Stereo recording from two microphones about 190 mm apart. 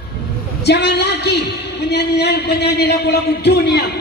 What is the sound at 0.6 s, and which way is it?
A man's voice, 60° left (ahead or behind).